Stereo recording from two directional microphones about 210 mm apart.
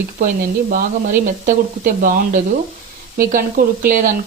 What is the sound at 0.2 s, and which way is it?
Speech, 40° right (ahead or behind).